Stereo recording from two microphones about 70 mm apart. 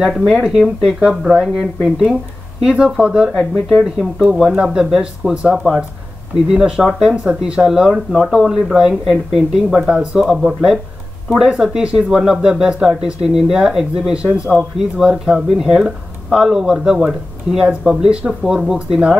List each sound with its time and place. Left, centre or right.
0.3 s speech: centre
3.3 s speech: centre
6.5 s speech: centre
14.6 s speech: centre